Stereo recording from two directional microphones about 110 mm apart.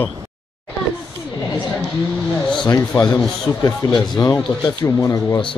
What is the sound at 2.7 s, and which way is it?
Speech, 30° left (ahead or behind).